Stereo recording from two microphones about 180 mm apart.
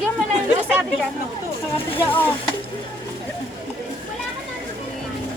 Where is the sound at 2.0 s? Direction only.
10° left (ahead or behind).